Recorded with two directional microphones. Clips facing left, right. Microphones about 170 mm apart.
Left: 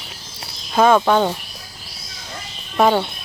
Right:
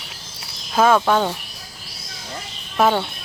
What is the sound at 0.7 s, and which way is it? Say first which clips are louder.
Speech: left 2 dB; 5° right (ahead or behind).